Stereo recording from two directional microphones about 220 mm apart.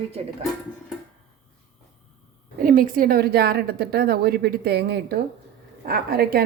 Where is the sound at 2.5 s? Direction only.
40° right (ahead or behind).